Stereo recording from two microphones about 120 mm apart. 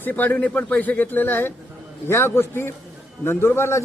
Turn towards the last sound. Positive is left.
turn(degrees=20)  # may be behind; listen again after turning